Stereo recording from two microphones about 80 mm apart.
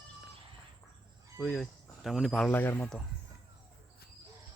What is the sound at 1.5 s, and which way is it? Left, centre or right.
Speech, centre.